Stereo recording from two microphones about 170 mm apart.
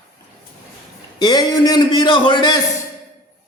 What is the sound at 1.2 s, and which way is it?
Speech, 25° left (ahead or behind).